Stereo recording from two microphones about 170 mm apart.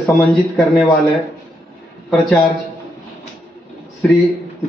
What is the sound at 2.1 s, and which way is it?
Speech, centre (ahead or behind).